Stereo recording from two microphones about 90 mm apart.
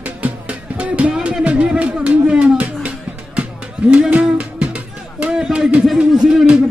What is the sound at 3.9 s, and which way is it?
Music, 15° right (ahead or behind).